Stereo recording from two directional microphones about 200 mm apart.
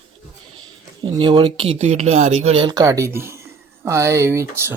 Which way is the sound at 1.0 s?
25° right (ahead or behind).